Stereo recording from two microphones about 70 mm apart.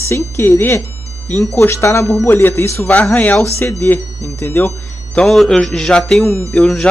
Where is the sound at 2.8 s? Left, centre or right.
Centre.